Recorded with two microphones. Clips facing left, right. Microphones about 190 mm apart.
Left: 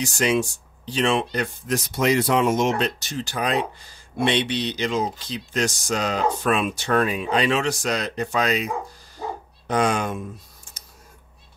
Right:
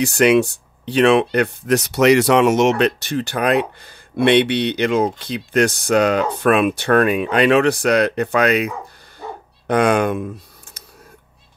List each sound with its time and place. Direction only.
0.0 s speech: 60° right (ahead or behind)